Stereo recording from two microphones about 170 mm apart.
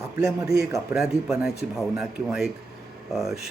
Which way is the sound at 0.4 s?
20° right (ahead or behind).